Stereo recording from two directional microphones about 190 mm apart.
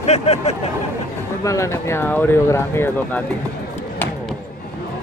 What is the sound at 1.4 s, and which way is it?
Speech, 15° left (ahead or behind).